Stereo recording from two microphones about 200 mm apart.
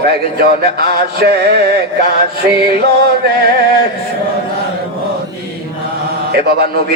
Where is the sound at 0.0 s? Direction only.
50° right (ahead or behind).